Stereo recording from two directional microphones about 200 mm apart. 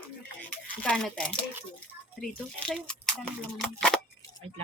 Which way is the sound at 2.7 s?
5° left (ahead or behind).